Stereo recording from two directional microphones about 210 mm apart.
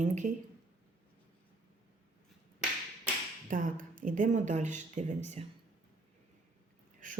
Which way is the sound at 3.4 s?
40° right (ahead or behind).